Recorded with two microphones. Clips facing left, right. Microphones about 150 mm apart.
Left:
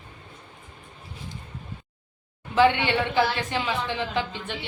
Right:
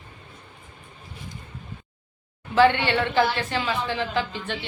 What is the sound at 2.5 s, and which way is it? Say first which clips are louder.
A woman's voice: right 1 dB; 15° left (ahead or behind).